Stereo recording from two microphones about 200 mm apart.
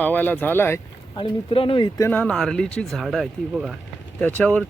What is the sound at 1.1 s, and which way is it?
Speech, 25° left (ahead or behind).